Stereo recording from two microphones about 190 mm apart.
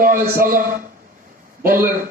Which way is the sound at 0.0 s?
50° right (ahead or behind).